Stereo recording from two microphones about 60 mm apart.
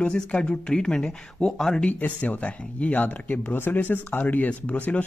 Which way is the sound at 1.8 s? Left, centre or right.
Left.